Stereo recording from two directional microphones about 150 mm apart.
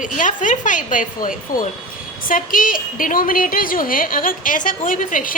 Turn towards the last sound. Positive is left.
turn(degrees=60)  # may be behind; listen again after turning